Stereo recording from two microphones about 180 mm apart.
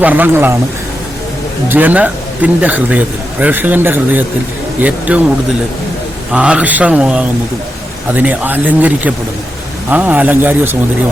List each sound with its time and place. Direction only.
0.0 s speech: 10° right (ahead or behind)
1.7 s speech: 10° right (ahead or behind)
6.3 s speech: 5° right (ahead or behind)